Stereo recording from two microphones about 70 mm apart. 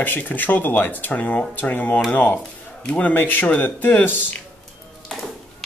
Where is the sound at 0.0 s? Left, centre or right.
Left.